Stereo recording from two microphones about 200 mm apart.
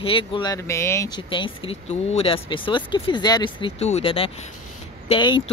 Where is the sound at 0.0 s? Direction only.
25° left (ahead or behind).